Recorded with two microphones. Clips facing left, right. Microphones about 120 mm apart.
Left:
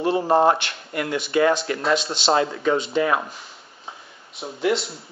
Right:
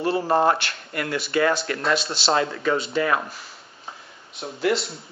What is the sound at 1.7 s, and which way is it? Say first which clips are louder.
Speech: left 2 dB; 5° left (ahead or behind).